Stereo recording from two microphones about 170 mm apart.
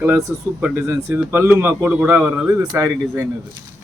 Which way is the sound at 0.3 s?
15° right (ahead or behind).